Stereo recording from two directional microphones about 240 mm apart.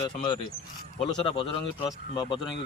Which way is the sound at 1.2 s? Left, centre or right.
Left.